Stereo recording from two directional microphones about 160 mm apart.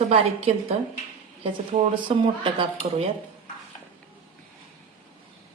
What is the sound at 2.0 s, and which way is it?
Speech, 30° right (ahead or behind).